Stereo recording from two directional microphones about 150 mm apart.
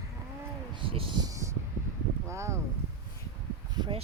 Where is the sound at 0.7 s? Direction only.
35° right (ahead or behind); by 2.6 s 20° right (ahead or behind).